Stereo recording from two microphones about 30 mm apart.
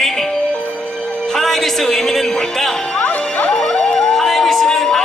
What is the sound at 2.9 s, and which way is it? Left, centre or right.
Music, left.